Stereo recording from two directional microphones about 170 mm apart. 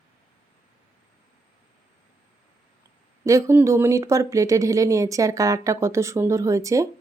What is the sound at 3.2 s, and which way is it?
Speech, 15° right (ahead or behind).